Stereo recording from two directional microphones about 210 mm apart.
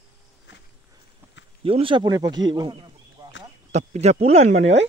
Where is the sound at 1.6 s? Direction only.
25° right (ahead or behind).